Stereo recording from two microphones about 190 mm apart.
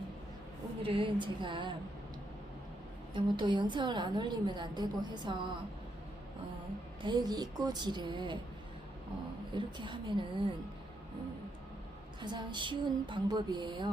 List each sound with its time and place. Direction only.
0.8 s a woman's voice: 25° right (ahead or behind)
3.2 s a woman's voice: 25° right (ahead or behind)
7.0 s a woman's voice: 20° right (ahead or behind)
9.6 s a woman's voice: 25° right (ahead or behind)
12.2 s a woman's voice: 25° right (ahead or behind)